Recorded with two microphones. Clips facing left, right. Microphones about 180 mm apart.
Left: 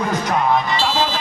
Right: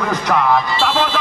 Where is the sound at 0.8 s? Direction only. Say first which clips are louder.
Right 2 dB; 55° right (ahead or behind).